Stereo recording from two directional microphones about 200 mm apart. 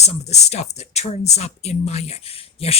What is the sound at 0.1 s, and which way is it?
Speech, 35° left (ahead or behind).